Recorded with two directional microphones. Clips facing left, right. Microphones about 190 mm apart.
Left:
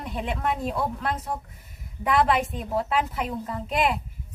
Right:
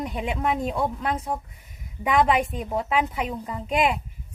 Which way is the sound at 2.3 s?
10° right (ahead or behind).